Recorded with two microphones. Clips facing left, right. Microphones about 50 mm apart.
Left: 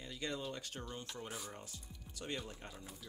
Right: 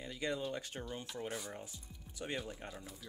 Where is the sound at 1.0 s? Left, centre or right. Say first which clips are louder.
Right 4 dB; centre.